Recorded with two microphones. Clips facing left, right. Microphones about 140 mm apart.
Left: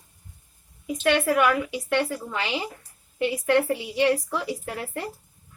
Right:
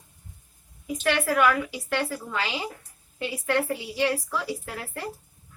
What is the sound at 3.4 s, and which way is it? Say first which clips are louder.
A woman's voice: left 3 dB; 20° left (ahead or behind).